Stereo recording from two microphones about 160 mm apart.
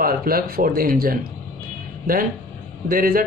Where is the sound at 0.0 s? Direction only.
65° right (ahead or behind).